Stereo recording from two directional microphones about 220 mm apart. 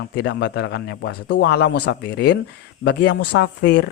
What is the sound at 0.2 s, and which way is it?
Speech, 50° left (ahead or behind).